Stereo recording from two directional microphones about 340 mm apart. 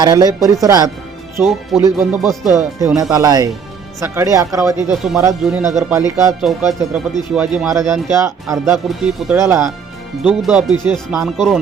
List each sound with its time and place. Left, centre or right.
0.0 s speech: centre